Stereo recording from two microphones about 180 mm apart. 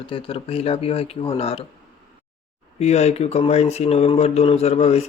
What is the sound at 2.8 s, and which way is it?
Speech, 35° left (ahead or behind).